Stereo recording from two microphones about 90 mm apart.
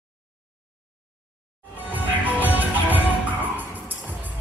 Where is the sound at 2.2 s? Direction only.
20° right (ahead or behind).